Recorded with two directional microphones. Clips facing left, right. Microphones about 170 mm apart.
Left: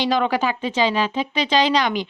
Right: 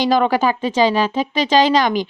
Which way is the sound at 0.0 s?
40° right (ahead or behind).